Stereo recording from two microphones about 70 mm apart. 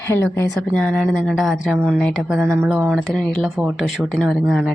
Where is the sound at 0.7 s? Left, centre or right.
Centre.